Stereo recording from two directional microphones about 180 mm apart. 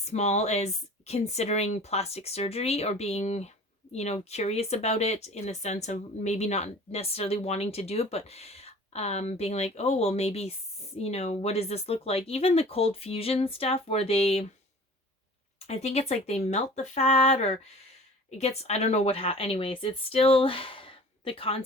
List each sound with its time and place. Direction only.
0.0 s speech: 40° left (ahead or behind)
15.6 s speech: 35° left (ahead or behind)